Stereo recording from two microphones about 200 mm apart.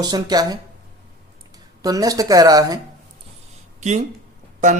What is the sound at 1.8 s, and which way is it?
Speech, 20° right (ahead or behind).